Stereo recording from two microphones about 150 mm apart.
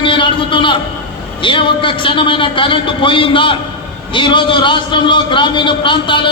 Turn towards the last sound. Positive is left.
turn(degrees=35)  # may be behind; listen again after turning